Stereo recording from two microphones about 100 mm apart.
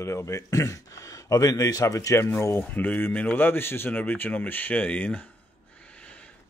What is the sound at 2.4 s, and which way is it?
Speech, 20° left (ahead or behind).